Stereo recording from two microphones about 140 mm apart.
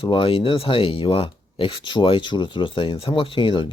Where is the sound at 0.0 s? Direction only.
40° left (ahead or behind).